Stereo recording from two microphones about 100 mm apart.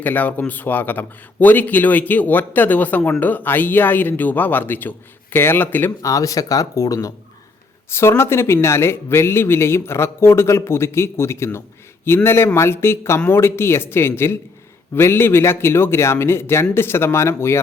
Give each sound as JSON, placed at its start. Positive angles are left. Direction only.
{"t": 0.0, "sound": "speech", "side_deg": 15}
{"t": 6.0, "sound": "speech", "side_deg": 35}